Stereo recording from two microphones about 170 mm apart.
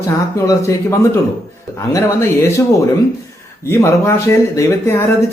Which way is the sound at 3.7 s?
15° left (ahead or behind).